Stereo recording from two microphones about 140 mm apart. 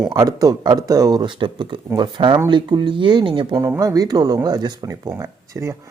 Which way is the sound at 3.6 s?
25° right (ahead or behind).